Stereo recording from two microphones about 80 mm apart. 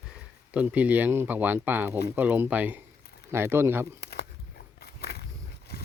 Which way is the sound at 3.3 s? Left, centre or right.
Right.